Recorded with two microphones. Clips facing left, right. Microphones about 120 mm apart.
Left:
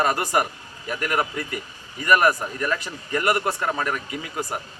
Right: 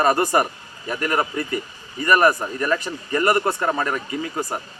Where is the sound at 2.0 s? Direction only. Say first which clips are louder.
Right 2 dB; 5° left (ahead or behind).